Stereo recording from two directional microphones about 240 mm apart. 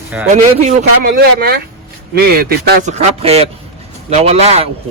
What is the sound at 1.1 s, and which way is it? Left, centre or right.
Speech, right.